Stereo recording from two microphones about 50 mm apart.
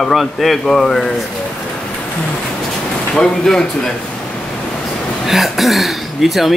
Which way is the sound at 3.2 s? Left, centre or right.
Centre.